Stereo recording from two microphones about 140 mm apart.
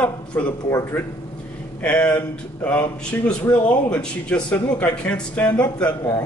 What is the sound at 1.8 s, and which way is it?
Speech, 10° left (ahead or behind).